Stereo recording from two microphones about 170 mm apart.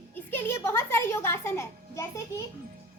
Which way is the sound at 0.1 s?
10° left (ahead or behind).